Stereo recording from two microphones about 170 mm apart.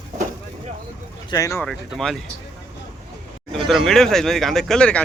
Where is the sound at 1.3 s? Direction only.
20° left (ahead or behind).